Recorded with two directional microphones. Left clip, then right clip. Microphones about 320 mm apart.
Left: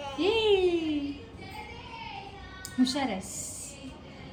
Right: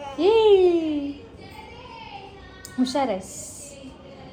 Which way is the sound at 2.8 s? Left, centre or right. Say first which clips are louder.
Right 6 dB; centre.